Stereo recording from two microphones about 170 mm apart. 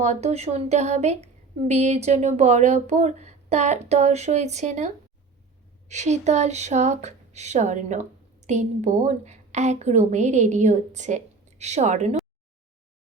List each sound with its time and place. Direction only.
0.0 s a woman's voice: 40° right (ahead or behind)
5.9 s speech: 40° right (ahead or behind)